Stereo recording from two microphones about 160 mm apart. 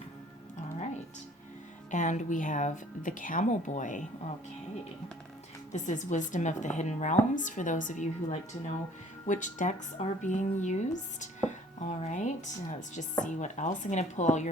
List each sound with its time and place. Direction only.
1.9 s speech: 50° left (ahead or behind)
5.7 s speech: 50° left (ahead or behind)